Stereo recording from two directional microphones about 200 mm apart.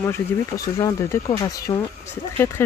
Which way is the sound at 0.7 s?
15° left (ahead or behind).